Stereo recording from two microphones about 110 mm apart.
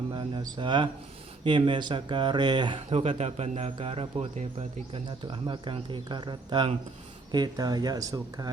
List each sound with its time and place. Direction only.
0.1 s a sound: 45° right (ahead or behind)
1.5 s speech: 45° right (ahead or behind)
2.9 s speech: 75° right (ahead or behind)
5.0 s speech: 45° right (ahead or behind)